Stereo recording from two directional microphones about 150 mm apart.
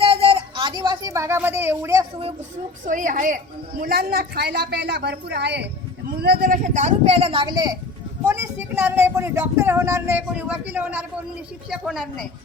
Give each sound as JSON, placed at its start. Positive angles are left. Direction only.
{"t": 0.0, "sound": "a sound", "side_deg": -40}
{"t": 2.8, "sound": "a woman's voice", "side_deg": -60}
{"t": 6.7, "sound": "speech", "side_deg": -45}
{"t": 11.7, "sound": "a woman's voice", "side_deg": 0}